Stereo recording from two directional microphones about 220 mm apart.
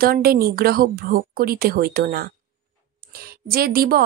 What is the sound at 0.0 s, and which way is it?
Speech, 45° right (ahead or behind).